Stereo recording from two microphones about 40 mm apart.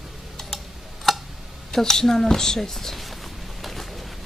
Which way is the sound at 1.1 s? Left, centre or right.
Centre.